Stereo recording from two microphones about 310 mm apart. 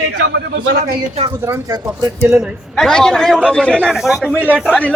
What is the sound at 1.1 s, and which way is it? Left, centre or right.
A man's voice, centre.